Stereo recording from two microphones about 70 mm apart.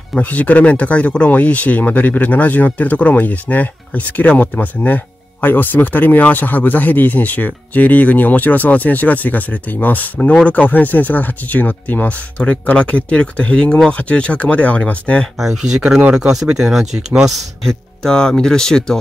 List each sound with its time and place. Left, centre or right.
0.2 s speech: left
15.3 s speech: centre